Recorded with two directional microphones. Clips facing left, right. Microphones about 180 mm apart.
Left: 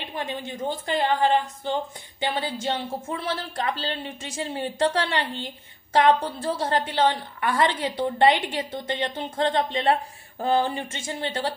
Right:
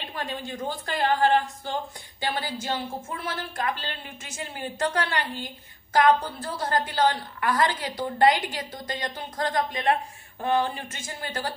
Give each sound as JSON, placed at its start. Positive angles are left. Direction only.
{"t": 0.0, "sound": "a woman's voice", "side_deg": 20}